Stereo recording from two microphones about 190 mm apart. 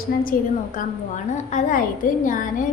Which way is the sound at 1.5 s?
45° left (ahead or behind).